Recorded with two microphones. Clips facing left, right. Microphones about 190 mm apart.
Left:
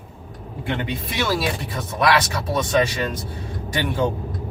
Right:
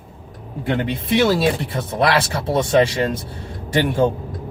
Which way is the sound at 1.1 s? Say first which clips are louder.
Right 8 dB; 25° right (ahead or behind).